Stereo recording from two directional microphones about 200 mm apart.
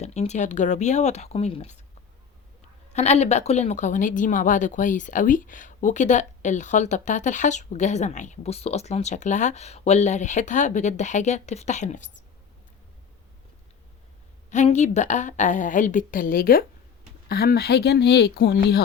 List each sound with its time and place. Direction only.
0.0 s speech: 35° left (ahead or behind)
2.9 s speech: 35° left (ahead or behind)
14.5 s speech: 35° left (ahead or behind); by 18.8 s 55° left (ahead or behind)